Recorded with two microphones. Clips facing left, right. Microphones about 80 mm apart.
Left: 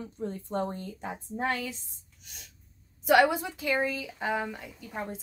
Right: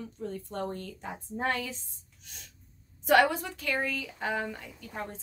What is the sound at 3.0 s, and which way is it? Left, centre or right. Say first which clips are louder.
Speech: left 1 dB; centre.